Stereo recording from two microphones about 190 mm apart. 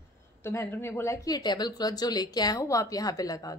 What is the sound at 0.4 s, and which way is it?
Speech, 15° left (ahead or behind).